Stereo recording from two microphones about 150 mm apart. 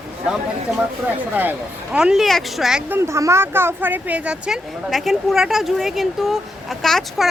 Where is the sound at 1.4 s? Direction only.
10° right (ahead or behind).